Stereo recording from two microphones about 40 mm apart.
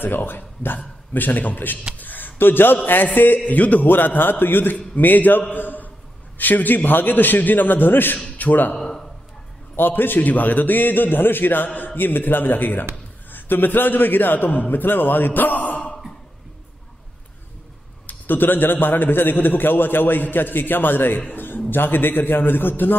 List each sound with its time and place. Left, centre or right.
0.0 s a man's voice: left
3.3 s a man's voice: left
3.9 s a man's voice: left
4.7 s a man's voice: left
5.5 s a sound: left
6.3 s a man's voice: left
8.2 s a man's voice: left
8.7 s a sound: centre
9.8 s a man's voice: left
18.0 s a man's voice: left